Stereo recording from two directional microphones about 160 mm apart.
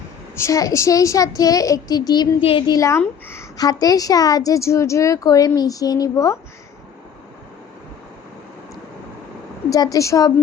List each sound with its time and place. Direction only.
0.3 s a woman's voice: 20° left (ahead or behind)
9.6 s a woman's voice: 20° left (ahead or behind)